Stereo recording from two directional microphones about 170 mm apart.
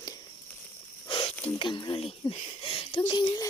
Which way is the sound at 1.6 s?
30° left (ahead or behind).